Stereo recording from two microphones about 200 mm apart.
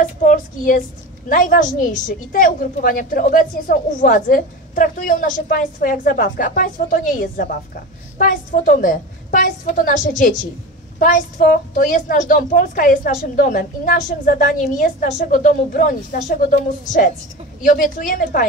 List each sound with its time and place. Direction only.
0.0 s a woman's voice: 40° left (ahead or behind)